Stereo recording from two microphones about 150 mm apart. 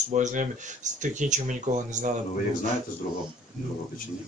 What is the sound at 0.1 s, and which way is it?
Speech, 55° right (ahead or behind).